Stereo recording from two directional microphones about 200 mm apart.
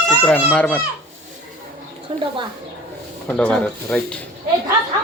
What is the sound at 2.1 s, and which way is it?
Child singing, 25° right (ahead or behind).